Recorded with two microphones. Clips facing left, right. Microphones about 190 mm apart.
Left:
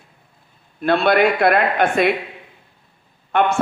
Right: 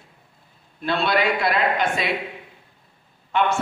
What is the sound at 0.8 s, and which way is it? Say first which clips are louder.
A man's voice: left 6 dB; 55° left (ahead or behind).